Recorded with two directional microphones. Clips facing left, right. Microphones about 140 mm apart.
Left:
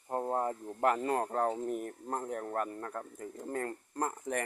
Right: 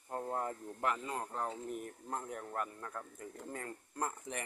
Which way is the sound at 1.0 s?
60° left (ahead or behind).